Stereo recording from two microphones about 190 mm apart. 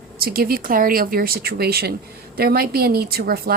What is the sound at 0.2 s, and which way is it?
A woman's voice, 50° right (ahead or behind).